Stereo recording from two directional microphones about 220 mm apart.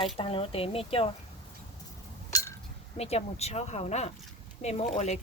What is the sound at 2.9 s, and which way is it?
A woman's voice, 30° left (ahead or behind).